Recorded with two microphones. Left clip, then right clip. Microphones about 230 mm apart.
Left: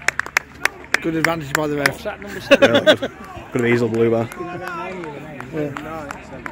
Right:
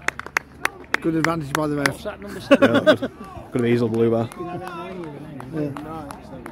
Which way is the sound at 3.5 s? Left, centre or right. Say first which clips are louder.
Left 3 dB; centre.